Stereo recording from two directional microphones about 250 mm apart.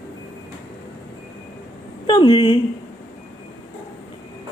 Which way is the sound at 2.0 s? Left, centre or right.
Centre.